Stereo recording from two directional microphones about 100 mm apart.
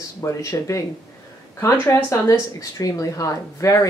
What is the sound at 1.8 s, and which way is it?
A woman's voice, 30° left (ahead or behind).